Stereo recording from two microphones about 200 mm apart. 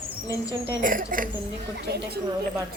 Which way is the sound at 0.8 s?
40° right (ahead or behind).